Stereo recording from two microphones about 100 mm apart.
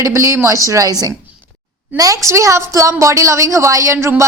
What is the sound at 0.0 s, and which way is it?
A woman's voice, 30° right (ahead or behind).